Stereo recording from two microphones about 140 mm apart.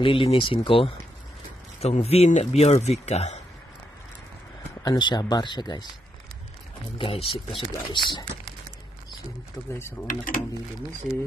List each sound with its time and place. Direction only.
0.0 s speech: 40° left (ahead or behind)
4.8 s speech: 30° left (ahead or behind)
7.0 s speech: 40° left (ahead or behind)
9.7 s speech: 20° left (ahead or behind)
10.0 s speech: 90° left